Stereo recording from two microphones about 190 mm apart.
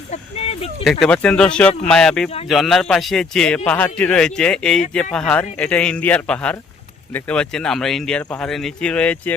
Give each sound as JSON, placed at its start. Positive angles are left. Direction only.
{"t": 0.1, "sound": "speech", "side_deg": 30}
{"t": 0.9, "sound": "speech", "side_deg": 5}